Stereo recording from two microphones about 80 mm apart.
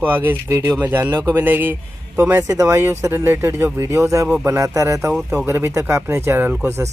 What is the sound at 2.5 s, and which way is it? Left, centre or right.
Speech, right.